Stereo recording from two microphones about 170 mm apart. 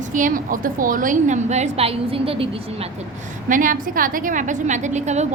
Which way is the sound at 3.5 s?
50° right (ahead or behind).